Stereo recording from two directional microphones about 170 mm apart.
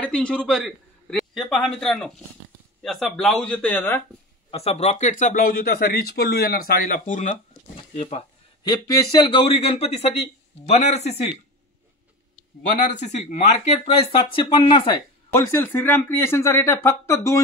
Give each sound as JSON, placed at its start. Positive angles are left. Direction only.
{"t": 0.0, "sound": "a man's voice", "side_deg": 5}
{"t": 4.5, "sound": "speech", "side_deg": 35}
{"t": 7.7, "sound": "a sound", "side_deg": 35}
{"t": 8.6, "sound": "speech", "side_deg": 20}
{"t": 12.7, "sound": "speech", "side_deg": 45}
{"t": 13.8, "sound": "speech", "side_deg": 30}
{"t": 15.3, "sound": "speech", "side_deg": 15}